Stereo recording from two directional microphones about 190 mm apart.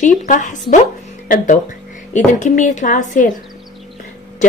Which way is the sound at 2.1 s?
40° left (ahead or behind).